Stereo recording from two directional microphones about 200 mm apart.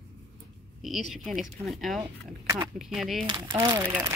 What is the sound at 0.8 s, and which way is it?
Speech, centre (ahead or behind).